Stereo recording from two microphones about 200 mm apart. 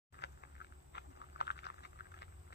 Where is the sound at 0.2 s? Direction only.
55° left (ahead or behind).